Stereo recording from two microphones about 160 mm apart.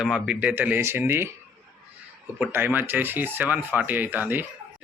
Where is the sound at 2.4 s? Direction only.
15° right (ahead or behind).